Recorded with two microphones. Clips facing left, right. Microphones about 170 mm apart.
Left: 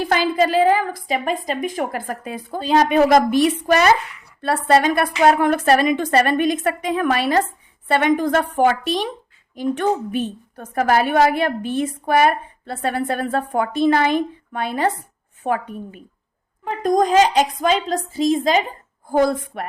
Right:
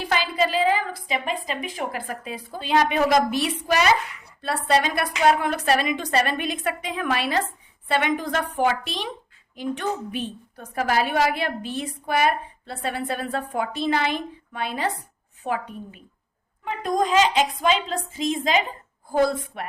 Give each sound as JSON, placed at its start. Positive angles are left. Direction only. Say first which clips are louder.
{"t": 0.0, "sound": "a woman's voice", "louder": "left 6 dB", "side_deg": 50}
{"t": 19.5, "sound": "a woman's voice", "louder": "left 4 dB", "side_deg": 50}